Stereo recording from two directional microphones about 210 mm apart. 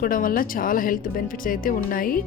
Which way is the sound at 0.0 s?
40° left (ahead or behind).